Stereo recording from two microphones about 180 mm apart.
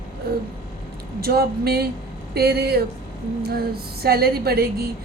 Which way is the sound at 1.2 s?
60° right (ahead or behind).